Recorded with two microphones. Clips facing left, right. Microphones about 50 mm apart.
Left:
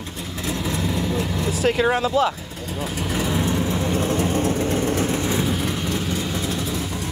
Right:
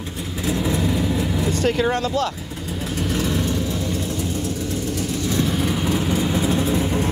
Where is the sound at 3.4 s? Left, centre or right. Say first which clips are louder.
Left 1 dB; left.